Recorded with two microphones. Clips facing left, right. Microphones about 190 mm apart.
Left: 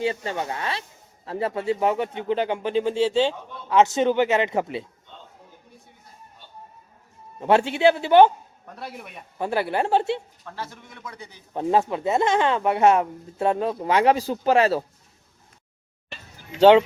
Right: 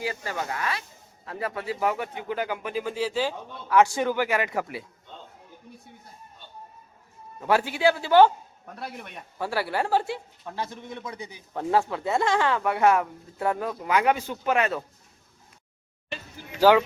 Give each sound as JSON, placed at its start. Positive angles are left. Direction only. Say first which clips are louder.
{"t": 0.0, "sound": "speech", "louder": "left 5 dB", "side_deg": 25}
{"t": 7.3, "sound": "speech", "louder": "left 4 dB", "side_deg": 25}
{"t": 8.6, "sound": "speech", "louder": "left 1 dB", "side_deg": 0}
{"t": 9.4, "sound": "speech", "louder": "left 4 dB", "side_deg": 20}
{"t": 10.4, "sound": "a man's voice", "louder": "right 3 dB", "side_deg": -20}
{"t": 11.5, "sound": "speech", "louder": "left 3 dB", "side_deg": 20}
{"t": 16.6, "sound": "speech", "louder": "left 5 dB", "side_deg": 25}